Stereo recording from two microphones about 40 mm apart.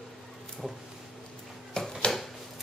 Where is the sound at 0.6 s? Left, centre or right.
Centre.